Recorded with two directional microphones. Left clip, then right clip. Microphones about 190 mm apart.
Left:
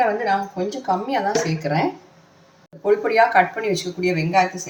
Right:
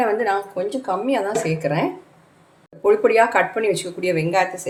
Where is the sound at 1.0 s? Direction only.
35° right (ahead or behind).